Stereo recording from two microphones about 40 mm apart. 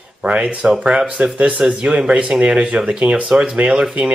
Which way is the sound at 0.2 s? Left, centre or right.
Right.